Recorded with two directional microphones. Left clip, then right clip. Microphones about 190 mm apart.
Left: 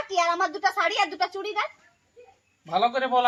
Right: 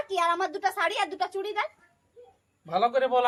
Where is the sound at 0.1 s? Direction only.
30° right (ahead or behind).